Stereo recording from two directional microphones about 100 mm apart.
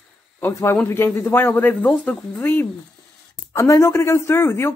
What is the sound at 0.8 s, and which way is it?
Speech, 25° left (ahead or behind).